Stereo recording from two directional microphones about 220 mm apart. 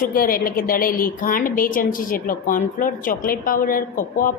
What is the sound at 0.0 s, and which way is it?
A woman's voice, 40° left (ahead or behind).